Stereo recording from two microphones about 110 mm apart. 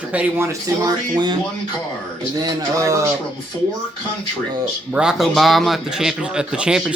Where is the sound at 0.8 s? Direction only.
40° right (ahead or behind).